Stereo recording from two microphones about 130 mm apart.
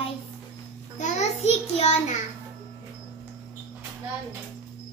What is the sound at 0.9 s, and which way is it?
A child's voice, 65° left (ahead or behind).